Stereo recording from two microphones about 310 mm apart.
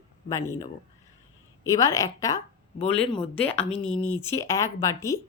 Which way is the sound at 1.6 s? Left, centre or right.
Centre.